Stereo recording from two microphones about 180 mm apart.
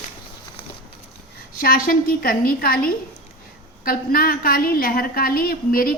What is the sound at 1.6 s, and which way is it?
A woman's voice, 50° left (ahead or behind).